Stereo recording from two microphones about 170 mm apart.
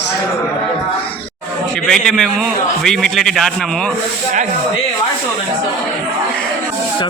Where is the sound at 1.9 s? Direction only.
5° left (ahead or behind).